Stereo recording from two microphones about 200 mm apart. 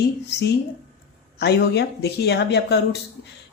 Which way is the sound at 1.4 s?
55° left (ahead or behind).